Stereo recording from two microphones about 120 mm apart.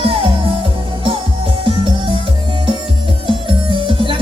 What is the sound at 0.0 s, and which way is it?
Music, 50° right (ahead or behind).